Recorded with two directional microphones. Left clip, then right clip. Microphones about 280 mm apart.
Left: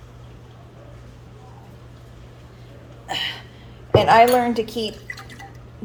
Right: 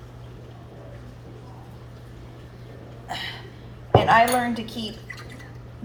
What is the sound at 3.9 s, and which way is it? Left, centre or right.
Speech, left.